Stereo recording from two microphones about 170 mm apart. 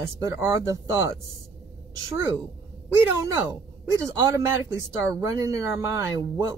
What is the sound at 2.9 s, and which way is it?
Speech, 20° right (ahead or behind).